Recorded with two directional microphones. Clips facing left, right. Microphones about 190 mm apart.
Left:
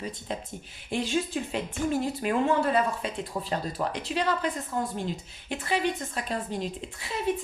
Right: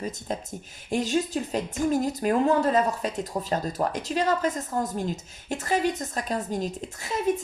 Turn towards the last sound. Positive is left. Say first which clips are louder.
# right 3 dB
turn(degrees=-45)  # may be behind; listen again after turning